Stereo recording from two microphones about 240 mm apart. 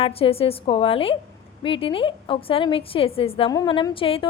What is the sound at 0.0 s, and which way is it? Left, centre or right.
A woman's voice, left.